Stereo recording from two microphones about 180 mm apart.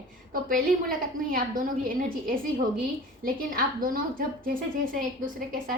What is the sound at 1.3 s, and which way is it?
A woman's voice, 50° right (ahead or behind).